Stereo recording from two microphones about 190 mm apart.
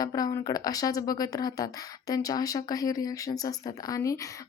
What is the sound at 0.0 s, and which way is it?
Speech, 20° left (ahead or behind).